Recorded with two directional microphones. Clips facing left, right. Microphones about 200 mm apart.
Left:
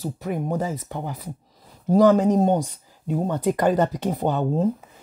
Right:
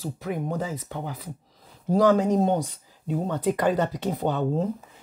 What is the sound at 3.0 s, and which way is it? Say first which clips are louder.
Speech: left 2 dB; 45° left (ahead or behind).